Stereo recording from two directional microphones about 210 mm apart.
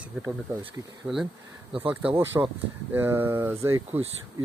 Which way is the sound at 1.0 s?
Centre (ahead or behind).